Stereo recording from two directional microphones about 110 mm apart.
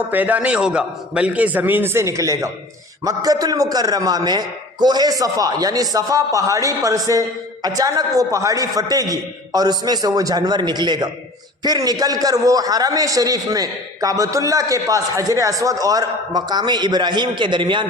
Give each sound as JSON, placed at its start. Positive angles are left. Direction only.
{"t": 0.1, "sound": "a man's voice", "side_deg": -15}